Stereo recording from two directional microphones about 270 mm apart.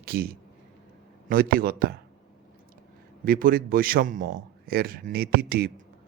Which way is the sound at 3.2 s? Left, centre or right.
Right.